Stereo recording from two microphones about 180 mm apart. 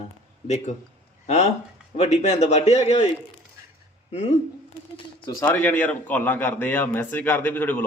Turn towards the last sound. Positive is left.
turn(degrees=10)  # may be behind; listen again after turning